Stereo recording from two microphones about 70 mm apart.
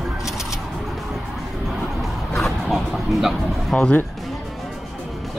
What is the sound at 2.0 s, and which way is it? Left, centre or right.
Speech, centre.